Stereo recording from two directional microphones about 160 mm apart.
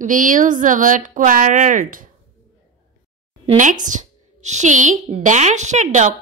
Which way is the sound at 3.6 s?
50° right (ahead or behind).